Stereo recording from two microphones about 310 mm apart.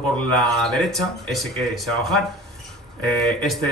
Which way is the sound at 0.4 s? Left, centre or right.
Centre.